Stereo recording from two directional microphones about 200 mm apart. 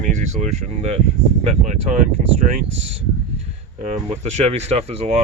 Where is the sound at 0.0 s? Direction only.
35° right (ahead or behind).